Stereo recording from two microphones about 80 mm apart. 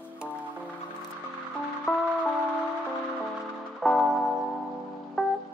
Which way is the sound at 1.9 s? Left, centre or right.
Centre.